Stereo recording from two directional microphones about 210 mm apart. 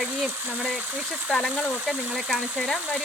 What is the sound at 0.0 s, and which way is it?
Speech, 5° right (ahead or behind).